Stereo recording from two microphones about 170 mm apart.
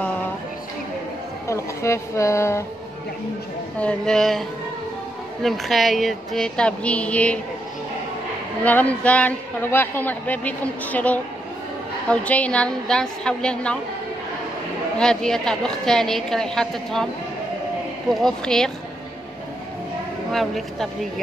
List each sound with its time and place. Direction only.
1.5 s speech: 15° left (ahead or behind)
3.8 s a woman's voice: 5° left (ahead or behind)
8.6 s a man's voice: 10° left (ahead or behind)
15.0 s a woman's voice: 5° left (ahead or behind)
18.1 s a woman's voice: 5° left (ahead or behind)
20.2 s a woman's voice: centre (ahead or behind)